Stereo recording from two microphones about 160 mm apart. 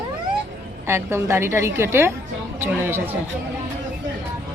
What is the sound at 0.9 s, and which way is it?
A woman's voice, 15° right (ahead or behind).